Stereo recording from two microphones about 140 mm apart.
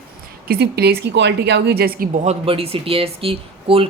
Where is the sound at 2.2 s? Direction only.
50° right (ahead or behind).